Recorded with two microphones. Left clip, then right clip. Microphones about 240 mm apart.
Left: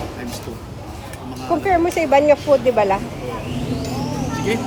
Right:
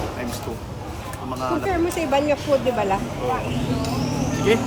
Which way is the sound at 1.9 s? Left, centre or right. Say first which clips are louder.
Left 7 dB; centre.